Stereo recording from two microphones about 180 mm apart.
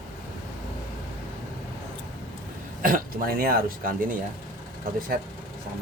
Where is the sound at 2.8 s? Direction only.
50° right (ahead or behind).